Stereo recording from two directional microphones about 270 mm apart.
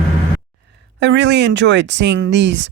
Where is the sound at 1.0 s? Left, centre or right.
Right.